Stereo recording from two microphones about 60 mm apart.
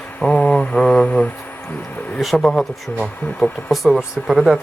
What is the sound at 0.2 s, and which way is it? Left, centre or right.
Mantra, left.